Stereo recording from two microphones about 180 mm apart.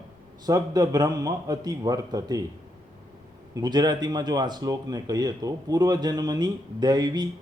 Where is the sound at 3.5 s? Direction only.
20° right (ahead or behind).